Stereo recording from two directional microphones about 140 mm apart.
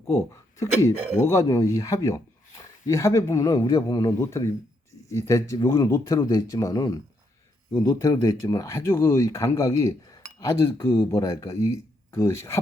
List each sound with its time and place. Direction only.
1.1 s speech: 20° left (ahead or behind)